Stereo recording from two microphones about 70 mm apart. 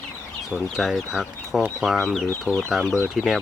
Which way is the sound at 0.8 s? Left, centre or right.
Centre.